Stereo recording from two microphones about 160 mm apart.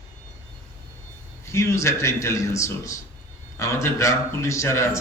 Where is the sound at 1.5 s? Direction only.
20° left (ahead or behind).